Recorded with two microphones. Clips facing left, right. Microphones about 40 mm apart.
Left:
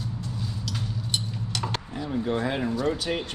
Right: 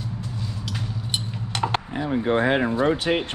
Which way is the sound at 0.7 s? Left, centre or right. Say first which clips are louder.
Right 1 dB; right.